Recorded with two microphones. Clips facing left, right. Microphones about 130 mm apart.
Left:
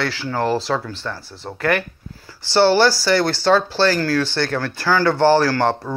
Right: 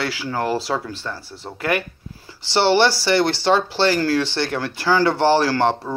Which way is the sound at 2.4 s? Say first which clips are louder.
Left 2 dB; 30° right (ahead or behind).